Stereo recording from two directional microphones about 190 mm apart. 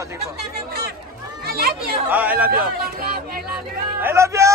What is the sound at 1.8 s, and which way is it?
Speech, 10° right (ahead or behind).